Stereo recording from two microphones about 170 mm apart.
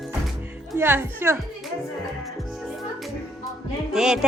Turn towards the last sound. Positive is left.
turn(degrees=-5)  # may be behind; listen again after turning